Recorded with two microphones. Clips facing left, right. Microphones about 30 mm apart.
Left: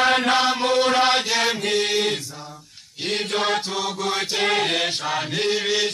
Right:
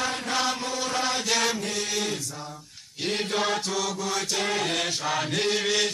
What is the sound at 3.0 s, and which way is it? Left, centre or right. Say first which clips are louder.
Music: left 3 dB; left.